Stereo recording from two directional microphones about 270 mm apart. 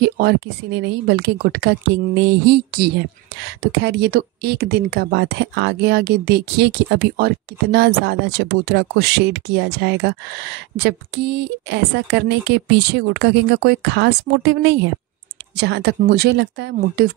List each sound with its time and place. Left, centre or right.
0.0 s speech: right